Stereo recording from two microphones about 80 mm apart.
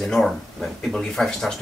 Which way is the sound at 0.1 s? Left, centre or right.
Centre.